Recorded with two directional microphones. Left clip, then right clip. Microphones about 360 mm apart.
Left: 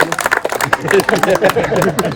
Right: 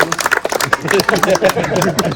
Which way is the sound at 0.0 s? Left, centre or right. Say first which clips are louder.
Even; left.